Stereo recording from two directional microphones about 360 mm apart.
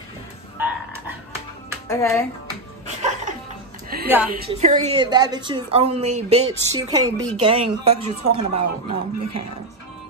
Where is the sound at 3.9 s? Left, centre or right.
Right.